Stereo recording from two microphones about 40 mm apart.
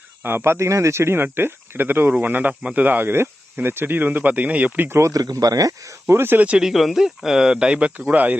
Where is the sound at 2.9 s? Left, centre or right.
Right.